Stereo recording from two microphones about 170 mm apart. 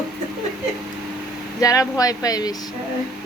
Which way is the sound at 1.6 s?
20° left (ahead or behind).